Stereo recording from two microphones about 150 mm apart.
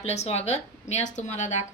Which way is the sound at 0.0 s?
45° left (ahead or behind).